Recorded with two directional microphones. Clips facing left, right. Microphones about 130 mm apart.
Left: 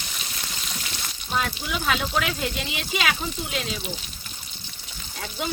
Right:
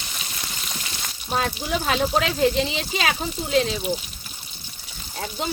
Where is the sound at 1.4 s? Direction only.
35° right (ahead or behind).